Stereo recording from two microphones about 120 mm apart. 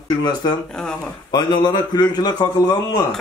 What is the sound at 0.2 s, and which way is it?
Speech, 35° left (ahead or behind).